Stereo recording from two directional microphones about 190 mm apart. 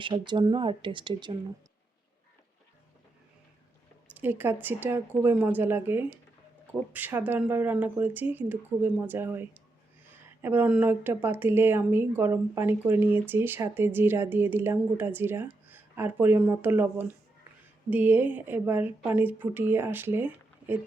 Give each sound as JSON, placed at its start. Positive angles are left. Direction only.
{"t": 0.0, "sound": "speech", "side_deg": -25}
{"t": 4.1, "sound": "a woman's voice", "side_deg": -10}